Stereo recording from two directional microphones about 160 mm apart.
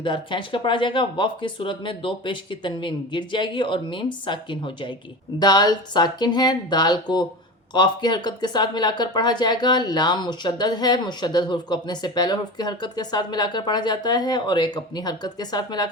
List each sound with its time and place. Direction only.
0.0 s speech: 30° left (ahead or behind)